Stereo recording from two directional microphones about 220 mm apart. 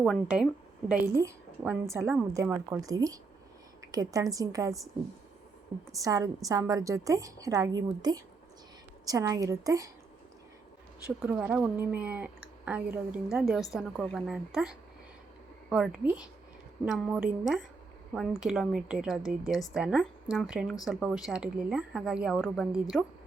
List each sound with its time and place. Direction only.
0.0 s a woman's voice: 5° right (ahead or behind)
5.9 s a woman's voice: 15° right (ahead or behind)
11.0 s a woman's voice: 5° right (ahead or behind)